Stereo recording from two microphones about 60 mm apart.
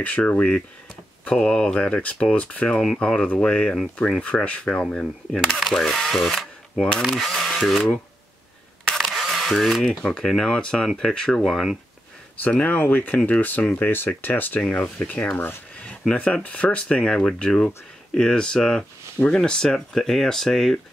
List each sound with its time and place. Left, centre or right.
0.0 s speech: left; by 7.9 s centre
8.9 s camera: centre
9.2 s speech: centre
12.4 s speech: left
15.8 s a sound: centre
16.4 s speech: left